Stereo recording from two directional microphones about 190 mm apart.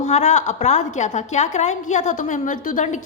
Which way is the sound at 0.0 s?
35° left (ahead or behind).